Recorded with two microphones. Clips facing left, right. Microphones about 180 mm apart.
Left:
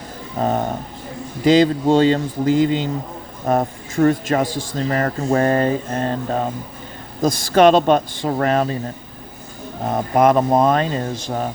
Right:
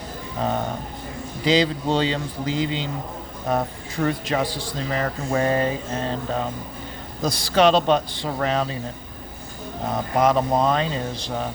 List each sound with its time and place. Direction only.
0.3 s speech: 40° left (ahead or behind)
9.9 s speech: 50° left (ahead or behind)